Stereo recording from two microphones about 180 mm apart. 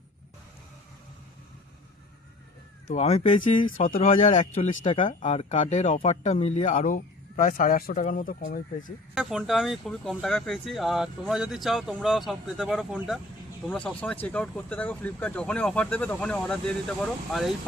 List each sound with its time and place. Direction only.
2.9 s speech: 35° left (ahead or behind)
3.7 s speech: 50° left (ahead or behind)
9.1 s speech: centre (ahead or behind)